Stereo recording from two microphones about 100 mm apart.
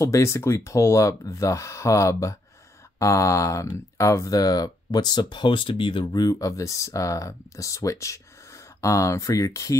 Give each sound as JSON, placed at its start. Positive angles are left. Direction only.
{"t": 0.0, "sound": "speech", "side_deg": 30}
{"t": 6.2, "sound": "speech", "side_deg": 35}